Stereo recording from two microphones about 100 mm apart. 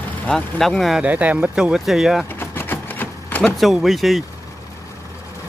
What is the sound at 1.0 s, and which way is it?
Speech, 15° right (ahead or behind).